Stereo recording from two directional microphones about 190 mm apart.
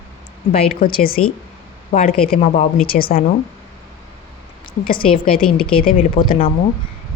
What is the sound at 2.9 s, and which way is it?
Speech, 50° left (ahead or behind).